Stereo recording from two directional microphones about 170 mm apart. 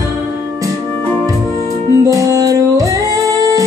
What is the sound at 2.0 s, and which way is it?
Music, 20° right (ahead or behind).